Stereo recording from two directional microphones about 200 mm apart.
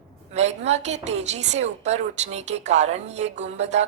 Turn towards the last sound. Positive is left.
turn(degrees=-35)  # may be behind; listen again after turning